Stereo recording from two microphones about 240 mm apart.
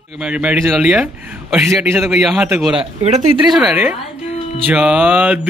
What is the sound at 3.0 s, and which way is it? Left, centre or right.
Speech, right.